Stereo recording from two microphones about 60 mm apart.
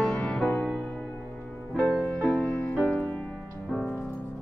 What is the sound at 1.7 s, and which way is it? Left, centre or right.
Music, left.